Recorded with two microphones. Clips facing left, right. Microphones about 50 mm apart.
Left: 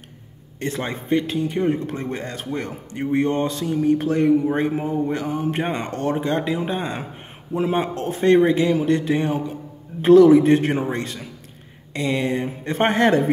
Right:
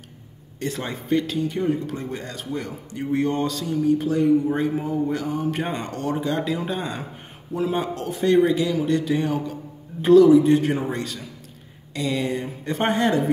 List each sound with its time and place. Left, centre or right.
0.6 s speech: left
3.8 s speech: left
4.5 s speech: left
6.4 s speech: left
10.2 s speech: left